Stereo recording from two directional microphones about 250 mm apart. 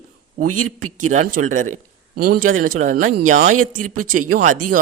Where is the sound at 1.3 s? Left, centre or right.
Right.